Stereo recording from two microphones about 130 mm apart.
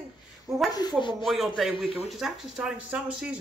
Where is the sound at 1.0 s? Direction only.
35° left (ahead or behind).